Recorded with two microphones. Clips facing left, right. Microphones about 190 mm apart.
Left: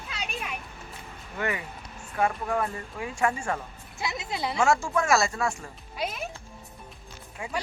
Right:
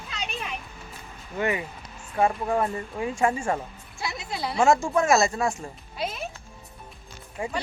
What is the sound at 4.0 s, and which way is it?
Speech, 20° left (ahead or behind).